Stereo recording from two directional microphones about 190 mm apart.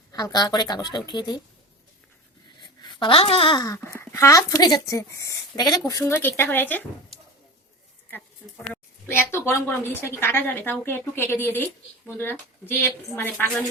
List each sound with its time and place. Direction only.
0.1 s speech: 20° left (ahead or behind)
2.8 s a woman's voice: 25° left (ahead or behind)
8.6 s a woman's voice: 10° left (ahead or behind)